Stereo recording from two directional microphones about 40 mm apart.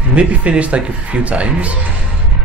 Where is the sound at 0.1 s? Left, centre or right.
Right.